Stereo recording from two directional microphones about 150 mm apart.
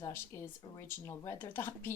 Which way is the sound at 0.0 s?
15° left (ahead or behind).